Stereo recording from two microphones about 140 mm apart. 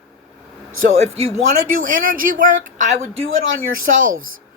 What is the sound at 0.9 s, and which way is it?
Speech, 50° right (ahead or behind).